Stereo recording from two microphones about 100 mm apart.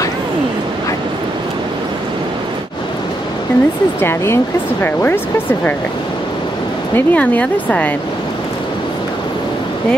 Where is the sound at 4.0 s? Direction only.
25° left (ahead or behind).